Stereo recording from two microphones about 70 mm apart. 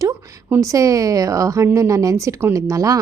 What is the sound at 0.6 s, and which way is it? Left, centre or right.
A woman's voice, right.